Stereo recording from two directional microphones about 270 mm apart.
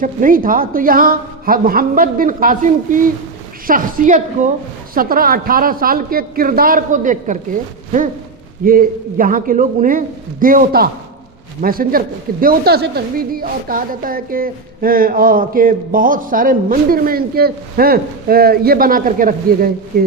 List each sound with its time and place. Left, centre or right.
0.0 s a woman's voice: right
8.6 s speech: right